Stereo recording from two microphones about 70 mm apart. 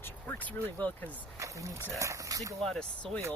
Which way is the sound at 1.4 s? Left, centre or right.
Right.